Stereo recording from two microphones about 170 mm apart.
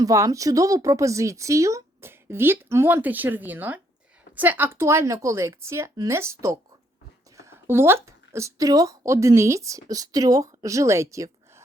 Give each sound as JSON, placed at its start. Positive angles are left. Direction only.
{"t": 0.0, "sound": "a woman's voice", "side_deg": -20}